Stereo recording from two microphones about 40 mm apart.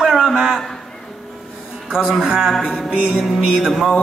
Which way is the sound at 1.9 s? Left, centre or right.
Centre.